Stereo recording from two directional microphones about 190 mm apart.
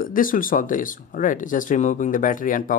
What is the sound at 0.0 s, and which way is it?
Speech, 45° left (ahead or behind).